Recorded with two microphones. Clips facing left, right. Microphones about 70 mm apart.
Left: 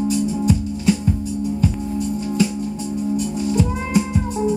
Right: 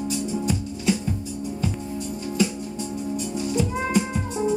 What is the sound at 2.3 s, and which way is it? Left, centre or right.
Music, centre.